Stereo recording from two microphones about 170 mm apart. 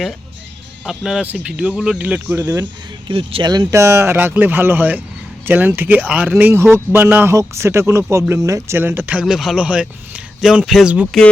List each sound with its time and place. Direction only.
0.9 s speech: 5° right (ahead or behind); by 2.6 s 20° right (ahead or behind)
3.1 s speech: 30° right (ahead or behind); by 11.2 s 5° right (ahead or behind)